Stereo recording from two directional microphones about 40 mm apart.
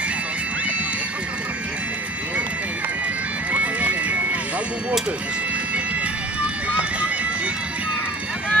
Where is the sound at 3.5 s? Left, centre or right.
Right.